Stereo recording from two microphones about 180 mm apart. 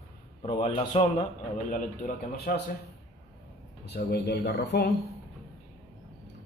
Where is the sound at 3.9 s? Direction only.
65° left (ahead or behind).